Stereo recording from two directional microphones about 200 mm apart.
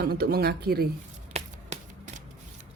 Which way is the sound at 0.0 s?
50° right (ahead or behind).